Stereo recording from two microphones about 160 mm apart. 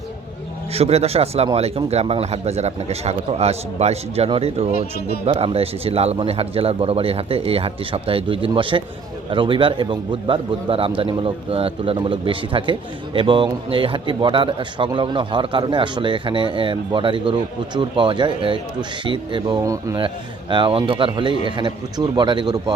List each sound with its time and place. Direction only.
0.7 s a man's voice: 40° right (ahead or behind)
4.9 s speech: 80° left
5.2 s a man's voice: 35° right (ahead or behind); by 20.0 s 20° right (ahead or behind)
20.5 s speech: 30° right (ahead or behind)